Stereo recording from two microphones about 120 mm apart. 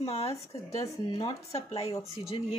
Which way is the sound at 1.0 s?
40° left (ahead or behind).